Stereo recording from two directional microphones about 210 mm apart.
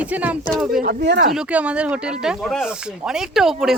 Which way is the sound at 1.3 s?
5° right (ahead or behind).